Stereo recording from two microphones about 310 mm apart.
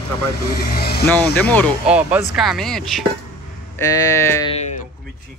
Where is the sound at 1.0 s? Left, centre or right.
Centre; by 4.8 s left.